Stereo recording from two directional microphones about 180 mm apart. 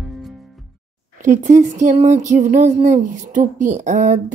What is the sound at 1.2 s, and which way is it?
Speech, 45° right (ahead or behind).